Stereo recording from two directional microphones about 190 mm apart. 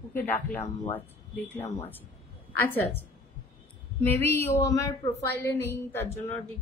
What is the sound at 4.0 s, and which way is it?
A woman's voice, 10° left (ahead or behind).